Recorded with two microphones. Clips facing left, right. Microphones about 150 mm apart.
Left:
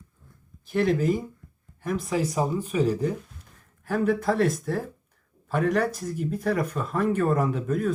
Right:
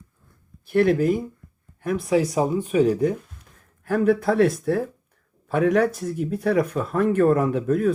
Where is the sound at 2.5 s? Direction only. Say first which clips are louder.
Right 5 dB; 35° left (ahead or behind).